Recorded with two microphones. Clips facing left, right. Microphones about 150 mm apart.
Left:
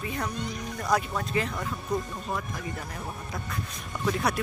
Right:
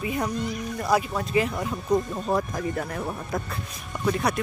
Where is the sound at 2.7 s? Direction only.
65° right (ahead or behind).